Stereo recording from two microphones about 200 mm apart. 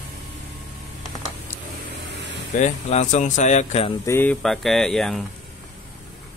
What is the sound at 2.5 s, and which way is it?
Mantra, 30° left (ahead or behind).